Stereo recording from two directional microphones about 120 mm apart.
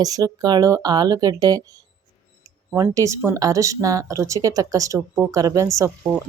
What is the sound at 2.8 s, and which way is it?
Speech, 25° right (ahead or behind).